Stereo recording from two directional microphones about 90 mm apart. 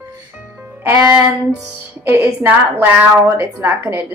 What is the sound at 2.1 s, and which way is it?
Speech, 25° right (ahead or behind).